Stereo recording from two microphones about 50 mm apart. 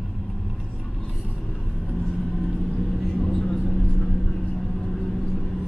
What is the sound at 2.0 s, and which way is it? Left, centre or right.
Vehicle, centre.